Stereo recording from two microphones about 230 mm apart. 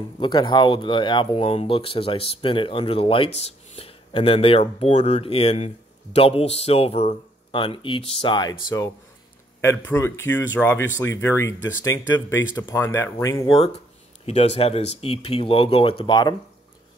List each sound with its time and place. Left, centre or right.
0.2 s speech: centre
9.6 s speech: centre
14.2 s speech: left